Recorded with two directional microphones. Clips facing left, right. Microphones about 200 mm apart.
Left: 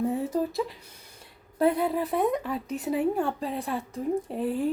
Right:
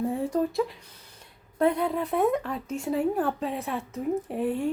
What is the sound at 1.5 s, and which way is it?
A woman's voice, 5° left (ahead or behind).